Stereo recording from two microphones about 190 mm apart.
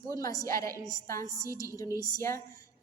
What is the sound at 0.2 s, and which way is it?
A woman's voice, 20° left (ahead or behind).